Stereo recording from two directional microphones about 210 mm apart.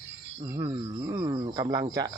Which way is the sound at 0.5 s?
20° right (ahead or behind).